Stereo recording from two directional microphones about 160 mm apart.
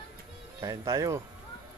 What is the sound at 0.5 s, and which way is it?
Speech, 20° right (ahead or behind).